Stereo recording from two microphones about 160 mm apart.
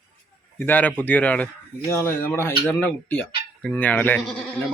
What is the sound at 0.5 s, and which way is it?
Speech, 10° left (ahead or behind).